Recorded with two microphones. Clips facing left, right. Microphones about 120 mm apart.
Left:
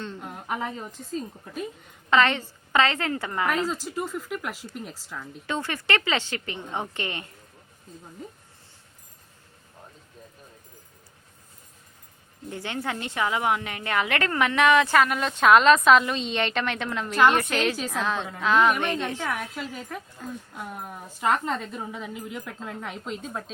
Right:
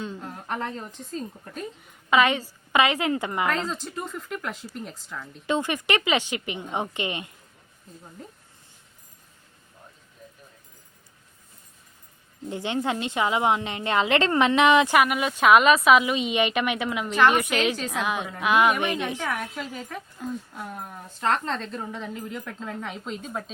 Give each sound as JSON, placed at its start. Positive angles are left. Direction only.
{"t": 0.2, "sound": "a woman's voice", "side_deg": 10}
{"t": 2.0, "sound": "a woman's voice", "side_deg": -10}
{"t": 3.5, "sound": "a woman's voice", "side_deg": 5}
{"t": 5.5, "sound": "a woman's voice", "side_deg": -15}
{"t": 8.2, "sound": "a woman's voice", "side_deg": 0}
{"t": 12.5, "sound": "a woman's voice", "side_deg": -20}
{"t": 20.5, "sound": "a woman's voice", "side_deg": 0}